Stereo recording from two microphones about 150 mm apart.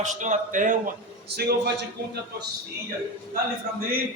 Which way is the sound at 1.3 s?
90° right.